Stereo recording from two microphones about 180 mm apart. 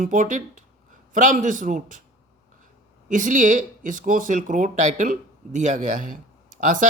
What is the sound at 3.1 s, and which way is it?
Speech, 45° right (ahead or behind).